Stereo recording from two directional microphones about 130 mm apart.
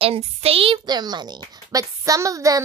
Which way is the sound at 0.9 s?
30° right (ahead or behind).